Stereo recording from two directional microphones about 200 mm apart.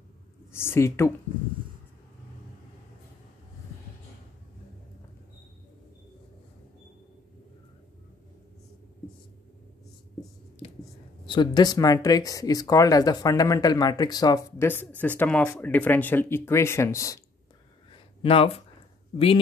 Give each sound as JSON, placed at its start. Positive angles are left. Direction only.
{"t": 0.5, "sound": "speech", "side_deg": 10}
{"t": 11.2, "sound": "speech", "side_deg": 20}
{"t": 17.9, "sound": "a sound", "side_deg": 30}
{"t": 19.1, "sound": "speech", "side_deg": 30}